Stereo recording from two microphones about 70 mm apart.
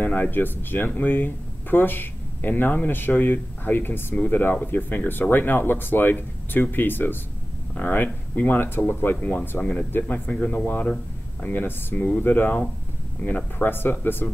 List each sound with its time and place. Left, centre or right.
0.0 s speech: left